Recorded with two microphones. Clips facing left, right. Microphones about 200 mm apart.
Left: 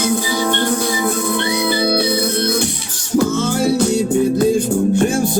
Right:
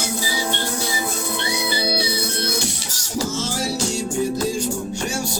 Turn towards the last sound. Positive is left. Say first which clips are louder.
# left 11 dB
turn(degrees=55)  # may be behind; listen again after turning